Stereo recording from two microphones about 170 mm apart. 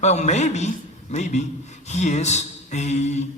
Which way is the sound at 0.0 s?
40° left (ahead or behind).